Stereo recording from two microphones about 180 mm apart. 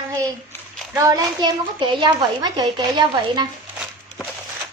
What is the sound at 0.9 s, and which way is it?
A woman's voice, 20° right (ahead or behind).